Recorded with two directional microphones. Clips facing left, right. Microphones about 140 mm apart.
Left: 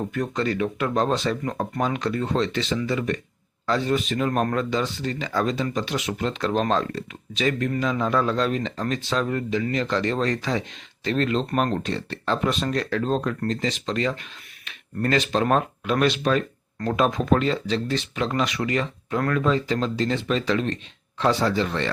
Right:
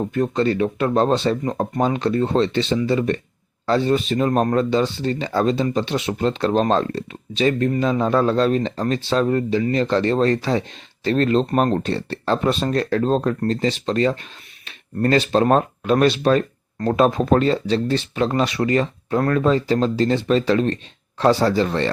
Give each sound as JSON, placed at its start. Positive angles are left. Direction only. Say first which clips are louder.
{"t": 0.0, "sound": "speech", "louder": "right 6 dB", "side_deg": -30}